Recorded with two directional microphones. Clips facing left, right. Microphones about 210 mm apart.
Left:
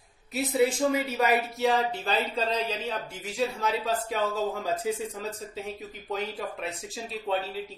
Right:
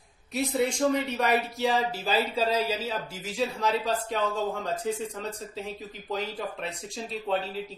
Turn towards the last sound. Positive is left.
turn(degrees=0)  # may be behind; listen again after turning